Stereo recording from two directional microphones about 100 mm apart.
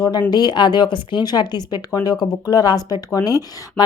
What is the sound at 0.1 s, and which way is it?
Speech, 45° left (ahead or behind).